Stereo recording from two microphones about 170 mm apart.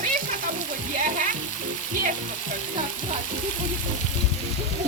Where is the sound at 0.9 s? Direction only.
50° right (ahead or behind).